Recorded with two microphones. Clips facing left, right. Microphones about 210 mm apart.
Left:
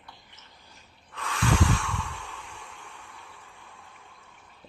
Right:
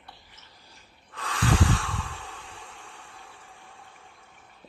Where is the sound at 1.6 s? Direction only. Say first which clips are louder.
Even; 30° right (ahead or behind).